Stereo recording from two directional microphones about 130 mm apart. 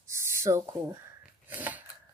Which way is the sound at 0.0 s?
20° right (ahead or behind).